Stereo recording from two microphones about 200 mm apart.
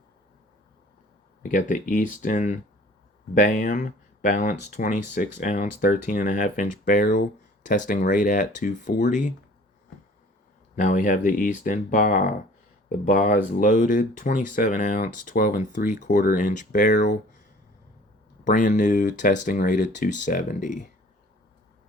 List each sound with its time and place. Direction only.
1.4 s speech: 40° left (ahead or behind)
10.8 s speech: 40° left (ahead or behind)
18.4 s speech: 40° left (ahead or behind)